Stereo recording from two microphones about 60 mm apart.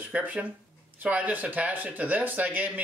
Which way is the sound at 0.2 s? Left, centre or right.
Right.